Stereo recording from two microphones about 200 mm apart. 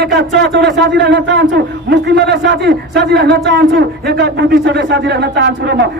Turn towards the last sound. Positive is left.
turn(degrees=-55)  # may be behind; listen again after turning